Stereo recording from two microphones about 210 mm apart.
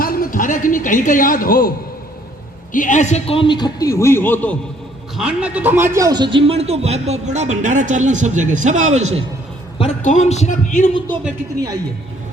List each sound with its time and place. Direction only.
0.0 s a man's voice: 45° left (ahead or behind)
2.7 s a man's voice: 35° left (ahead or behind); by 4.5 s 10° left (ahead or behind)
5.1 s a man's voice: 5° right (ahead or behind); by 9.2 s 30° right (ahead or behind)
10.0 s a man's voice: 35° left (ahead or behind)